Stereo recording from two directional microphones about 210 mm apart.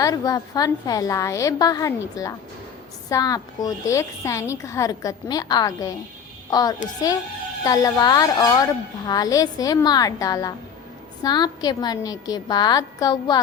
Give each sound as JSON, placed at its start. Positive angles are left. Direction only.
{"t": 0.0, "sound": "a woman's voice", "side_deg": 15}